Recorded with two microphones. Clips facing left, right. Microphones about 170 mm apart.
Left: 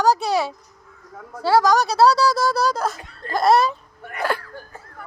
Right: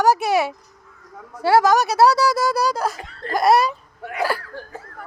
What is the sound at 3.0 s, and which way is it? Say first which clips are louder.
Speech: right 4 dB; 90° right.